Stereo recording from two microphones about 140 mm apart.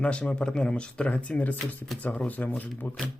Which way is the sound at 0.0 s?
10° left (ahead or behind).